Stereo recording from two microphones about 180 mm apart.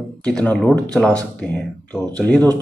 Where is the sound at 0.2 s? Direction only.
5° left (ahead or behind).